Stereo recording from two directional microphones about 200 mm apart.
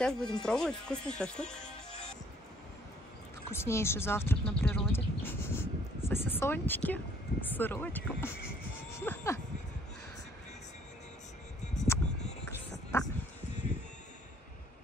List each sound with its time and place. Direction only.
0.0 s speech: 5° left (ahead or behind)
3.5 s speech: 15° left (ahead or behind)
11.6 s music: 35° left (ahead or behind)